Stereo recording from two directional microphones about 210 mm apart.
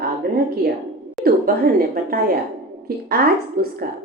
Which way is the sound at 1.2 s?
45° right (ahead or behind).